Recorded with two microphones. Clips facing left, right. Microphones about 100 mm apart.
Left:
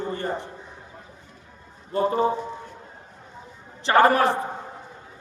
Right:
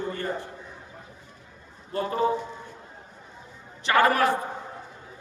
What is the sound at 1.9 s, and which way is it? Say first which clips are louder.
Speech: left 3 dB; 25° left (ahead or behind).